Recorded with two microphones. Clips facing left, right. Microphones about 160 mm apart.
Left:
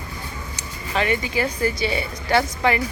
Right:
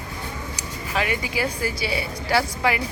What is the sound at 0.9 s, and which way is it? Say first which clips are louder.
Speech: left 3 dB; 5° right (ahead or behind).